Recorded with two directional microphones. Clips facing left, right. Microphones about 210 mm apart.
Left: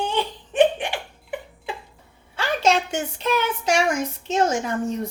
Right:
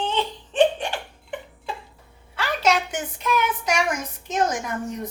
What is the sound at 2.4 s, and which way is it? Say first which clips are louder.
A woman's voice: left 2 dB; 30° left (ahead or behind).